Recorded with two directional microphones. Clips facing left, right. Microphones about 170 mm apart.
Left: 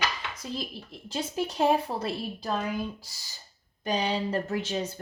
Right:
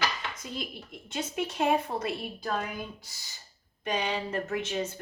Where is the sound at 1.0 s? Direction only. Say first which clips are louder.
Left 2 dB; 30° left (ahead or behind).